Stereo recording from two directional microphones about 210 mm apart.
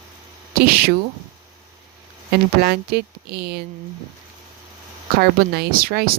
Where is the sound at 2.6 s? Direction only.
50° right (ahead or behind).